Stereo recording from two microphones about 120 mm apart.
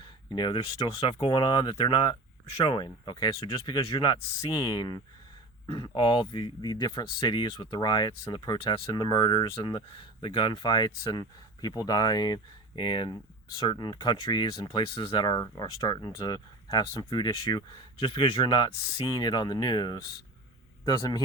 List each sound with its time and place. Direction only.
0.0 s speech: 40° left (ahead or behind)